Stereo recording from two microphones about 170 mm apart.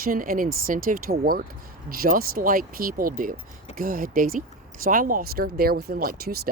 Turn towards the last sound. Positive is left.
turn(degrees=-60)  # may be behind; listen again after turning